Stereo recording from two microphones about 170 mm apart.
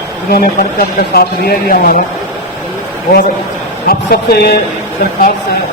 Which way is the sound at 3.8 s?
65° left (ahead or behind).